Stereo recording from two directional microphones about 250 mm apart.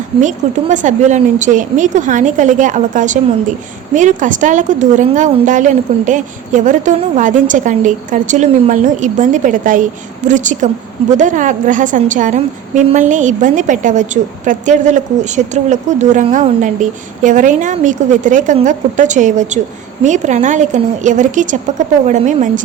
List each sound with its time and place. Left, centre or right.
0.2 s a woman's voice: right